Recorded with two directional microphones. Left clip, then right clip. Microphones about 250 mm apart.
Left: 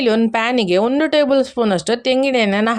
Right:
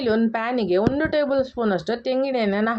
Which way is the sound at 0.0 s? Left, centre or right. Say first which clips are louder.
Left 6 dB; left.